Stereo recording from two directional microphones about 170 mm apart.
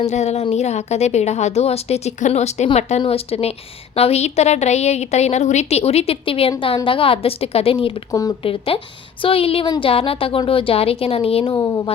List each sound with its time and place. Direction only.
0.0 s speech: 40° left (ahead or behind)
8.1 s speech: 20° left (ahead or behind)
8.4 s speech: 35° left (ahead or behind)
11.5 s speech: 25° left (ahead or behind)